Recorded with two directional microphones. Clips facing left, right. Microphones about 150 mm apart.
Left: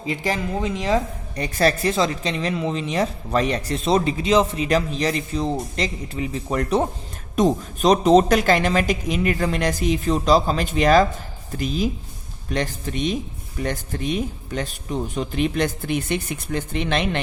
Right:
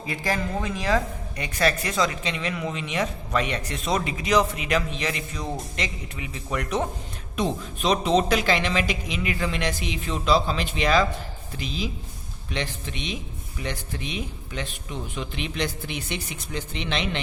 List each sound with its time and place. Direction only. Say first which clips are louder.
0.0 s speech: left 3 dB; 20° left (ahead or behind)
1.4 s a woman's voice: left 5 dB; 35° left (ahead or behind); by 17.2 s 50° left (ahead or behind)